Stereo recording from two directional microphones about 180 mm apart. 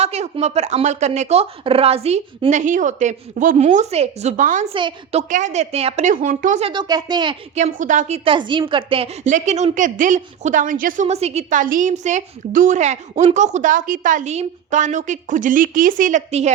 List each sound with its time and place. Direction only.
0.0 s speech: 35° right (ahead or behind)
4.7 s speech: 30° right (ahead or behind)
5.3 s a woman's voice: 40° right (ahead or behind)
6.6 s speech: 30° right (ahead or behind)
7.5 s a woman's voice: 45° right (ahead or behind)